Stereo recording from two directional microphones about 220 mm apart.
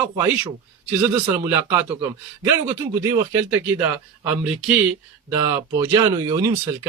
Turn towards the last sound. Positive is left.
turn(degrees=-20)  # may be behind; listen again after turning